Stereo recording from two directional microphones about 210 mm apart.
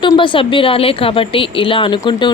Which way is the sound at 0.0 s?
20° left (ahead or behind).